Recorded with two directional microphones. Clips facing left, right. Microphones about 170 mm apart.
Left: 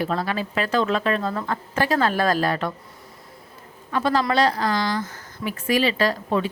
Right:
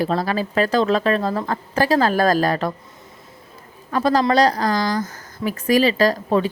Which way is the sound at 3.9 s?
40° right (ahead or behind).